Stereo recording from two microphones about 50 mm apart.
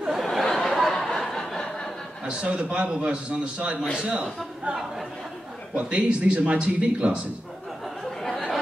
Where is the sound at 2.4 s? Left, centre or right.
Right.